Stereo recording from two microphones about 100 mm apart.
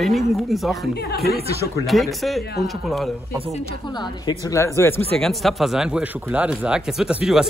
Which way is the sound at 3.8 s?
45° left (ahead or behind).